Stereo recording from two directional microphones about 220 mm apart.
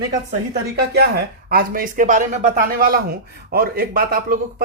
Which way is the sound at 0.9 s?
45° right (ahead or behind).